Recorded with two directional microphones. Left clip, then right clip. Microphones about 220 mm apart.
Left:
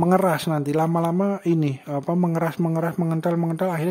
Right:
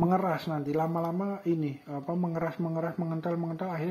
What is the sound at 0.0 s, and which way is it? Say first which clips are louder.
Speech: left 8 dB; 40° left (ahead or behind).